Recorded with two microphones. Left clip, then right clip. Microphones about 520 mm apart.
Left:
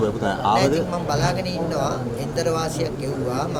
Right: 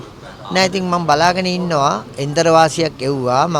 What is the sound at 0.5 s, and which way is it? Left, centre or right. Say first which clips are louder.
A man's voice: right 8 dB; right.